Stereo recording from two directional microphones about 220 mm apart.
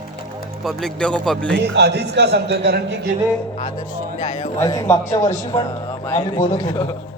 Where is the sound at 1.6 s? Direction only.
50° right (ahead or behind).